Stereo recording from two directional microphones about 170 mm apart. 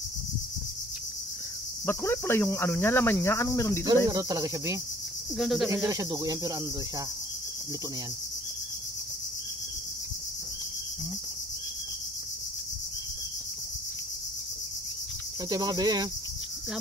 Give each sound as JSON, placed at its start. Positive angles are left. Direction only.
{"t": 1.9, "sound": "cricket", "side_deg": 15}
{"t": 4.1, "sound": "speech", "side_deg": -20}
{"t": 5.4, "sound": "speech", "side_deg": 0}
{"t": 5.7, "sound": "speech", "side_deg": -20}
{"t": 15.5, "sound": "speech", "side_deg": -20}